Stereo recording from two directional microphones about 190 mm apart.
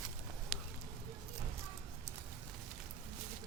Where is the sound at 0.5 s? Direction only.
35° right (ahead or behind).